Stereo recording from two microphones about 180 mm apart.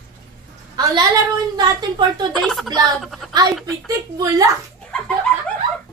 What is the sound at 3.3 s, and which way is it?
A woman's voice, 20° right (ahead or behind).